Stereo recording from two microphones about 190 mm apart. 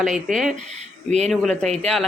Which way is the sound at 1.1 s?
35° right (ahead or behind).